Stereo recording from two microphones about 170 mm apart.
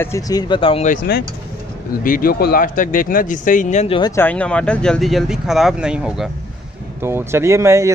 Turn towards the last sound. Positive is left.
turn(degrees=-15)  # may be behind; listen again after turning